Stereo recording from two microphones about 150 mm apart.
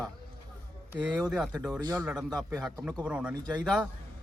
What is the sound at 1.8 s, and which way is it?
Speech, 25° right (ahead or behind).